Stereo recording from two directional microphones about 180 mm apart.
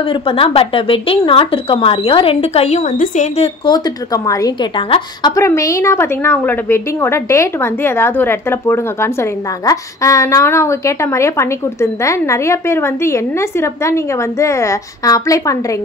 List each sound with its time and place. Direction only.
0.0 s speech: 30° left (ahead or behind)
3.6 s a woman's voice: 20° left (ahead or behind)
5.3 s a woman's voice: 15° left (ahead or behind)